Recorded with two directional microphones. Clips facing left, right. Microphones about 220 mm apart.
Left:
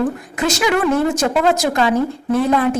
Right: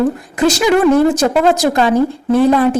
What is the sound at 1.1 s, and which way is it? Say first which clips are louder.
A woman's voice: right 4 dB; 35° right (ahead or behind).